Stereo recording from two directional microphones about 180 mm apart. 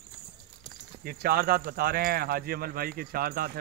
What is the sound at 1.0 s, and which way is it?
Speech, 55° right (ahead or behind).